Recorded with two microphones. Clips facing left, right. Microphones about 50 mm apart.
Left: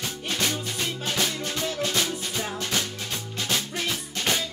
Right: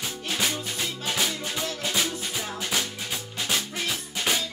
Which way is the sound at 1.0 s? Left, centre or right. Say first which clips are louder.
Even; centre.